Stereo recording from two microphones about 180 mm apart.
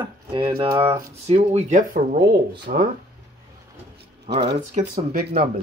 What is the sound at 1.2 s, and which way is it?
Speech, 35° right (ahead or behind).